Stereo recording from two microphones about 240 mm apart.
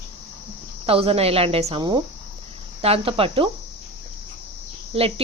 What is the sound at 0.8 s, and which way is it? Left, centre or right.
Speech, right.